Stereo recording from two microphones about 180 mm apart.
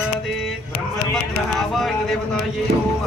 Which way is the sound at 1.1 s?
Centre (ahead or behind).